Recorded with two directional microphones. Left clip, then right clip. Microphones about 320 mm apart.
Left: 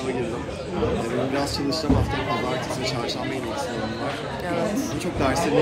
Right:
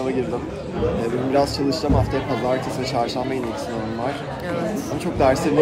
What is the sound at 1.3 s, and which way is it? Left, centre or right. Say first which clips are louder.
Speech: right 6 dB; centre.